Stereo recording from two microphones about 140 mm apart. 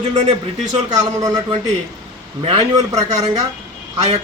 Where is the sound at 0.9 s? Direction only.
30° right (ahead or behind).